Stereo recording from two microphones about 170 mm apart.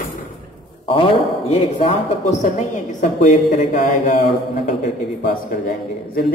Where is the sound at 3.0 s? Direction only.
50° left (ahead or behind).